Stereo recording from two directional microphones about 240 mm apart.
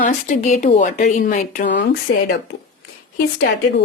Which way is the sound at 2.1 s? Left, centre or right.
Left.